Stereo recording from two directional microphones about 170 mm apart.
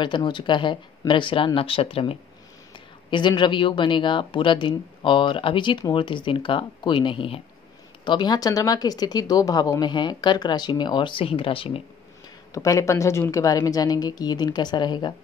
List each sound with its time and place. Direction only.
0.0 s speech: 25° left (ahead or behind)
12.5 s speech: 20° left (ahead or behind)